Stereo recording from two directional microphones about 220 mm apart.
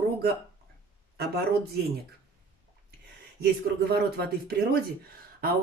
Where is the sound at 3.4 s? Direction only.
45° right (ahead or behind).